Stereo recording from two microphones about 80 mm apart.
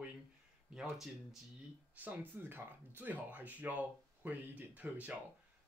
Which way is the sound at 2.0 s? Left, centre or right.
Right.